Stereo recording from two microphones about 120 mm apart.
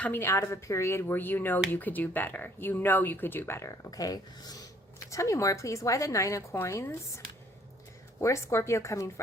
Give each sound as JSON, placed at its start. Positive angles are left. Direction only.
{"t": 0.0, "sound": "speech", "side_deg": 20}
{"t": 8.2, "sound": "speech", "side_deg": 25}